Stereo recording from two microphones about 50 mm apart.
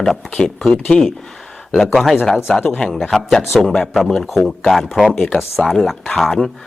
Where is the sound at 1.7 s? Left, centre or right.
Centre.